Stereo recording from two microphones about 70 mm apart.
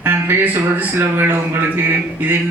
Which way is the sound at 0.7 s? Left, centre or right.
Right.